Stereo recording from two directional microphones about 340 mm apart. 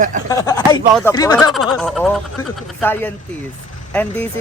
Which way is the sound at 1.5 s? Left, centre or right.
Centre.